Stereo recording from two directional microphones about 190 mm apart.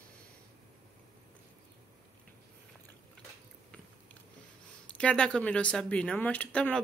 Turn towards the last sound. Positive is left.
turn(degrees=5)  # may be behind; listen again after turning